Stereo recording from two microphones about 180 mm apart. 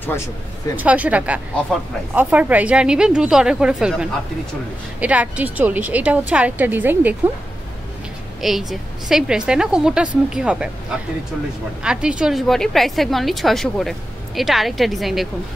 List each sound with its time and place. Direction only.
0.0 s speech: 15° left (ahead or behind)
0.7 s a woman's voice: 10° right (ahead or behind)
8.4 s a woman's voice: centre (ahead or behind)
11.8 s a woman's voice: 5° right (ahead or behind)